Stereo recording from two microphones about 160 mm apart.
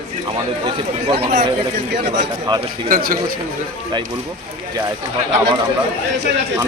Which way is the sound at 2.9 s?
65° right (ahead or behind).